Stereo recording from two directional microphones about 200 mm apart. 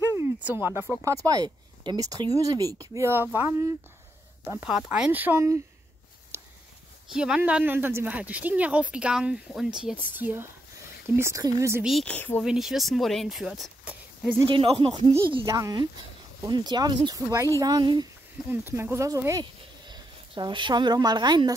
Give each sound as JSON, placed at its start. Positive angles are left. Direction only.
{"t": 0.1, "sound": "a sound", "side_deg": -10}
{"t": 1.0, "sound": "speech", "side_deg": -15}
{"t": 7.1, "sound": "speech", "side_deg": -5}
{"t": 11.8, "sound": "a woman's voice", "side_deg": 0}
{"t": 14.5, "sound": "speech", "side_deg": -25}